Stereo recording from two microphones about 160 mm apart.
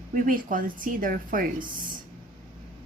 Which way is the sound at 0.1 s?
60° right (ahead or behind).